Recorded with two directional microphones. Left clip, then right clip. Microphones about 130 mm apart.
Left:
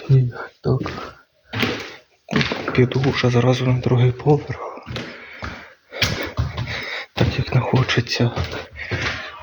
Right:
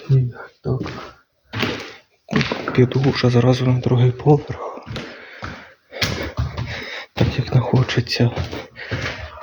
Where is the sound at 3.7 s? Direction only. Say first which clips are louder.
Even; 25° right (ahead or behind).